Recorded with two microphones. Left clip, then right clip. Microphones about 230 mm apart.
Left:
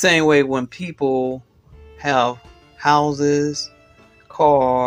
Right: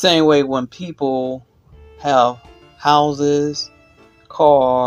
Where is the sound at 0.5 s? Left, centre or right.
Left.